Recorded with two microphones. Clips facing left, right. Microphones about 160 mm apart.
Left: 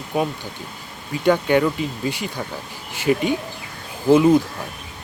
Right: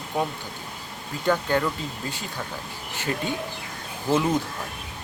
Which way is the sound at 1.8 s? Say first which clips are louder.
Left 8 dB; 15° left (ahead or behind).